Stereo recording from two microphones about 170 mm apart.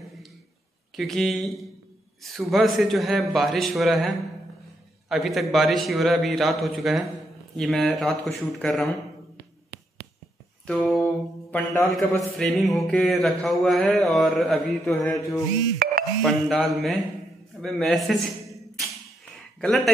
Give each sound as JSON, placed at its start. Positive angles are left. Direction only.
{"t": 0.9, "sound": "speech", "side_deg": 0}
{"t": 5.1, "sound": "speech", "side_deg": 0}
{"t": 10.7, "sound": "speech", "side_deg": 5}
{"t": 11.5, "sound": "a man's voice", "side_deg": 20}
{"t": 11.9, "sound": "speech", "side_deg": 0}
{"t": 15.0, "sound": "mantra", "side_deg": 20}
{"t": 15.8, "sound": "music", "side_deg": -60}
{"t": 16.2, "sound": "speech", "side_deg": 0}
{"t": 17.6, "sound": "a sound", "side_deg": 5}
{"t": 19.6, "sound": "speech", "side_deg": 0}